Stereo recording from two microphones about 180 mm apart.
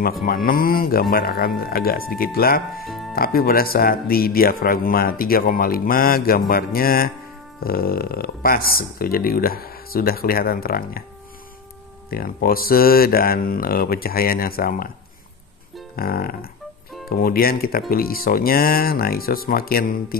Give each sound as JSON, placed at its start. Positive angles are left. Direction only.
{"t": 0.2, "sound": "speech", "side_deg": 55}
{"t": 2.8, "sound": "music", "side_deg": 0}
{"t": 3.2, "sound": "speech", "side_deg": 55}
{"t": 12.1, "sound": "speech", "side_deg": 55}
{"t": 16.0, "sound": "speech", "side_deg": 55}